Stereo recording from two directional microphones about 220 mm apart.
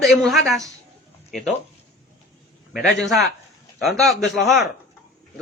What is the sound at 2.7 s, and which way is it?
Speech, centre (ahead or behind).